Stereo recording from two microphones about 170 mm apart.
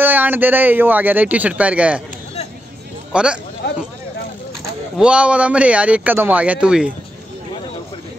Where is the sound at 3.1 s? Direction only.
5° right (ahead or behind).